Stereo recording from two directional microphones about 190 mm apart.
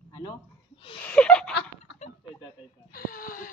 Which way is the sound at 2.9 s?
50° left (ahead or behind).